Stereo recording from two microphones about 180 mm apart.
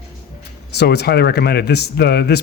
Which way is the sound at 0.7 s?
65° left (ahead or behind).